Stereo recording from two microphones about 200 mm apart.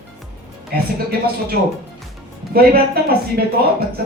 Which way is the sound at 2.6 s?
50° right (ahead or behind).